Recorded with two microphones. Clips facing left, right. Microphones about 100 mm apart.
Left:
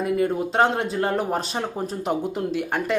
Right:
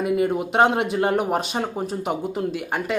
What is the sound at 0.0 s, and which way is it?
Speech, 10° right (ahead or behind).